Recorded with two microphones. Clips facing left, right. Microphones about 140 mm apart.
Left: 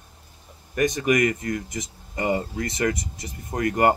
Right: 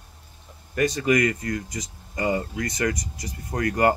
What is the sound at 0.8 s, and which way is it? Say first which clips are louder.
Speech: even; 20° left (ahead or behind).